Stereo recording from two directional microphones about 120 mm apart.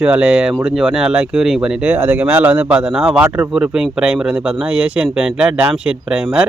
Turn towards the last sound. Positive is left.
turn(degrees=-10)  # may be behind; listen again after turning